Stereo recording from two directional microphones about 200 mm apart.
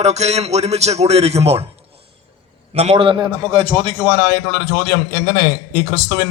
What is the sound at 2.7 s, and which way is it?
A man's voice, 30° right (ahead or behind).